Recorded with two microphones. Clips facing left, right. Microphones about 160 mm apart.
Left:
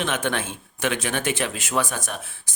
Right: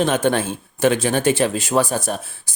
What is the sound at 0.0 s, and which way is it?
Speech, 35° right (ahead or behind).